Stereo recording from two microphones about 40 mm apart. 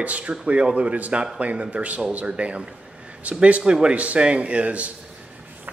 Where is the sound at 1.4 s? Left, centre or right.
Right.